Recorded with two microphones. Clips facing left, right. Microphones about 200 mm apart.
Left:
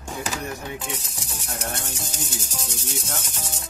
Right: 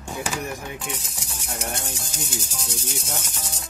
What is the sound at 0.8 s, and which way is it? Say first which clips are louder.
Music: even; centre (ahead or behind).